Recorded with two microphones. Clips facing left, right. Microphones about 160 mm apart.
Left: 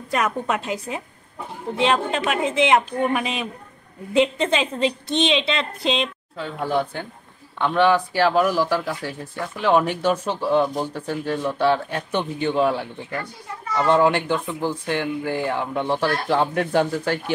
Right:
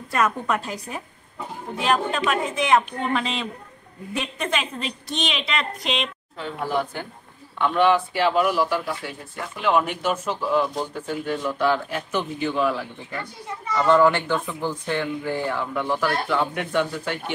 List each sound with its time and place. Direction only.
0.1 s a woman's voice: 20° left (ahead or behind)
4.1 s a woman's voice: 25° left (ahead or behind)
7.6 s speech: 30° left (ahead or behind)
13.8 s a woman's voice: 20° left (ahead or behind)
14.9 s speech: 10° left (ahead or behind)
15.5 s speech: 20° left (ahead or behind)